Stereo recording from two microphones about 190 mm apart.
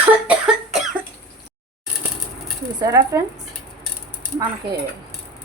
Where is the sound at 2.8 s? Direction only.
20° right (ahead or behind).